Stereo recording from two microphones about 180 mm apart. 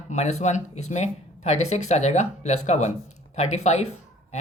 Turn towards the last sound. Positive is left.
turn(degrees=40)  # may be behind; listen again after turning